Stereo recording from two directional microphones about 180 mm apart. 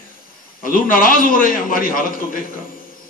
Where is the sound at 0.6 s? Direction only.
50° left (ahead or behind).